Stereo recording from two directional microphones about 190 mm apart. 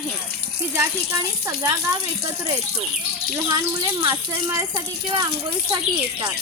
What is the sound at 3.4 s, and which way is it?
Speech, 20° right (ahead or behind).